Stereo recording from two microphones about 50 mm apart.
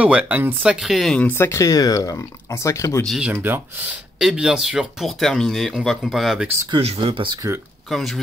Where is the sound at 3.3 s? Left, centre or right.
Right.